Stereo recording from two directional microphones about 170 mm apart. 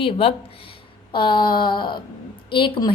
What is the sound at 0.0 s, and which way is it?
A woman's voice, 35° left (ahead or behind).